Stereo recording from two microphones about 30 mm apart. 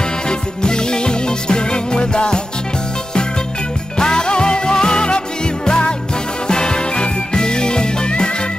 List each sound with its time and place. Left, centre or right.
0.3 s music: left
4.0 s music: left